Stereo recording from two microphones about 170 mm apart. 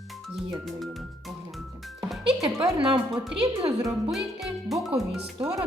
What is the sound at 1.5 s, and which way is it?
Music, centre (ahead or behind).